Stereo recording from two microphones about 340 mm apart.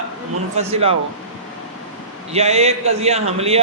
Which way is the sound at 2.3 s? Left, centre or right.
Centre.